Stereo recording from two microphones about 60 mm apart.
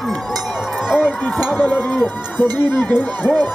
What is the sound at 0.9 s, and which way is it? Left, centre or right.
Speech, centre.